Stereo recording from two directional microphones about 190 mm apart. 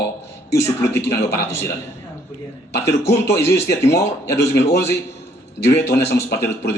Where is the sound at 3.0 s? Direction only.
60° left (ahead or behind).